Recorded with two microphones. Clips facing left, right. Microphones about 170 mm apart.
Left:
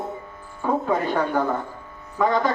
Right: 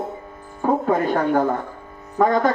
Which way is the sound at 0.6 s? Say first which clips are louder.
Right 3 dB; 45° right (ahead or behind).